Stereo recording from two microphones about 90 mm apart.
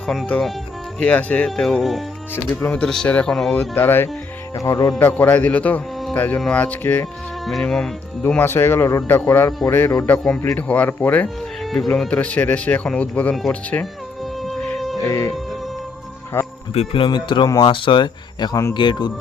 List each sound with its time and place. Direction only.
0.3 s speech: 5° left (ahead or behind)
1.5 s speech: centre (ahead or behind)
2.5 s speech: 15° left (ahead or behind)
4.5 s speech: 40° left (ahead or behind)
4.9 s speech: 20° left (ahead or behind)
7.6 s speech: 5° left (ahead or behind)
8.3 s speech: 20° left (ahead or behind)
11.6 s music: centre (ahead or behind)
11.9 s speech: 15° left (ahead or behind)
15.0 s speech: 35° left (ahead or behind)
16.7 s speech: 75° left (ahead or behind); by 19.1 s 55° left (ahead or behind)